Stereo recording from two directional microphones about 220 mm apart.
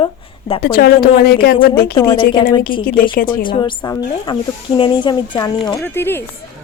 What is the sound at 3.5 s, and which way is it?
Speech, 20° left (ahead or behind).